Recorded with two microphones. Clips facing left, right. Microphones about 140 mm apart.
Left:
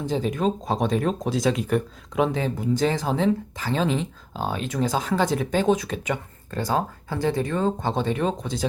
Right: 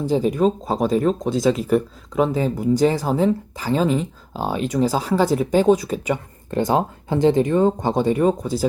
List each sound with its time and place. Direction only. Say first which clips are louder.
0.0 s speech: right 6 dB; 10° right (ahead or behind)
6.5 s speech: right 6 dB; 20° right (ahead or behind)